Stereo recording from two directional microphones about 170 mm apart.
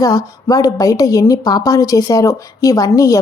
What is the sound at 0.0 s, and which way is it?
A woman's voice, 20° left (ahead or behind).